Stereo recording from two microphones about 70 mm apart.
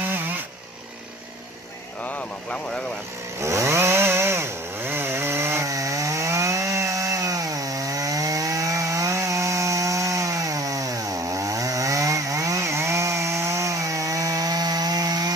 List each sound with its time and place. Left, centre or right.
2.0 s speech: left
3.3 s chainsaw: right